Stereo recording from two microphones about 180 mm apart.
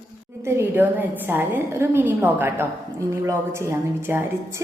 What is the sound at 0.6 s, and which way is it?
Speech, 10° right (ahead or behind).